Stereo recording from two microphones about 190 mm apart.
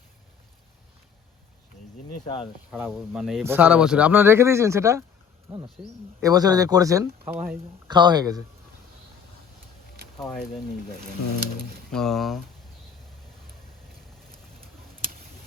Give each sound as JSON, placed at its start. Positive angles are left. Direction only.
{"t": 2.7, "sound": "speech", "side_deg": -5}
{"t": 10.2, "sound": "speech", "side_deg": 0}
{"t": 11.9, "sound": "speech", "side_deg": 0}